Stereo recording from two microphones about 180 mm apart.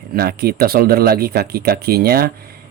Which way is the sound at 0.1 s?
60° right (ahead or behind).